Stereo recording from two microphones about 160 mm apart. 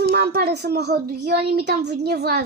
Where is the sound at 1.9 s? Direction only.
85° right.